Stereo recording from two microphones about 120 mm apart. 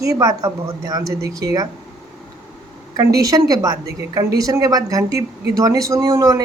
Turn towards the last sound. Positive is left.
turn(degrees=-25)  # may be behind; listen again after turning